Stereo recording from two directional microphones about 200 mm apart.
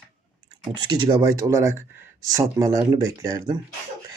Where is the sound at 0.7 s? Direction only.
20° right (ahead or behind).